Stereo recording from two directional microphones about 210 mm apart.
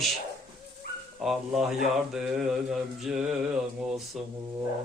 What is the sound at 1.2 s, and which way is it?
Mantra, centre (ahead or behind).